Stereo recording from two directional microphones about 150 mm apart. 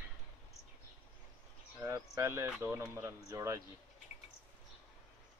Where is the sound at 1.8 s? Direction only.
20° right (ahead or behind).